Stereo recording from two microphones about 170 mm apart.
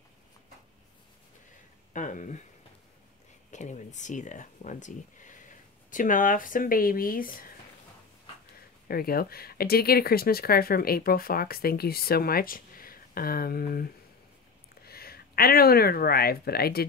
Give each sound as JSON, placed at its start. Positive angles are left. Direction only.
{"t": 2.0, "sound": "speech", "side_deg": 50}
{"t": 3.5, "sound": "speech", "side_deg": 45}
{"t": 8.8, "sound": "speech", "side_deg": 60}